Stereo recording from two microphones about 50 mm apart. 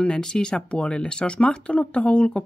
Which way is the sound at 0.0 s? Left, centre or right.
Centre.